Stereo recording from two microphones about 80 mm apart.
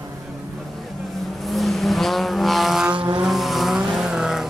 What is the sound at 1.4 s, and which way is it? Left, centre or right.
Vehicle, centre.